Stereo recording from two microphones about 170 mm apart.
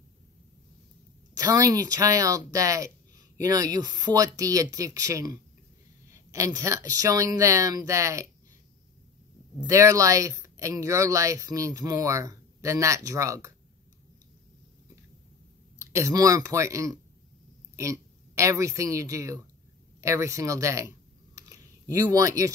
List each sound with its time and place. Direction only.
1.3 s speech: 20° right (ahead or behind)
9.7 s speech: 20° right (ahead or behind)
15.8 s a woman's voice: 15° right (ahead or behind)
21.9 s speech: 20° right (ahead or behind)